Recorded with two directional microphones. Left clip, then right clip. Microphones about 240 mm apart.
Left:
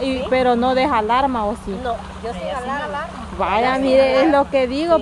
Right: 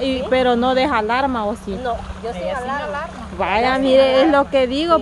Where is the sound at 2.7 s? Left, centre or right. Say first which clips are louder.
Even; centre.